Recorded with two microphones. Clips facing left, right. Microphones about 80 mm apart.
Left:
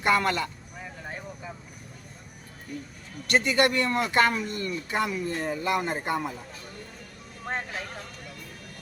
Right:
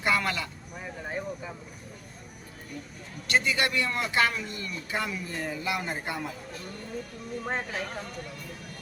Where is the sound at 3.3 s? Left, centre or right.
Left.